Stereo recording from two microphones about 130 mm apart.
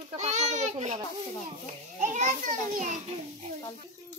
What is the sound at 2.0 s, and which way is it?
Children playing, 70° right (ahead or behind).